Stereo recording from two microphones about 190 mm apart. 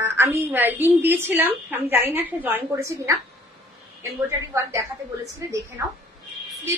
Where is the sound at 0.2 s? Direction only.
10° right (ahead or behind).